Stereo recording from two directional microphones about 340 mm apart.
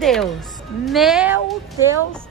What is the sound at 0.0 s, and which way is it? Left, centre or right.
Music, centre.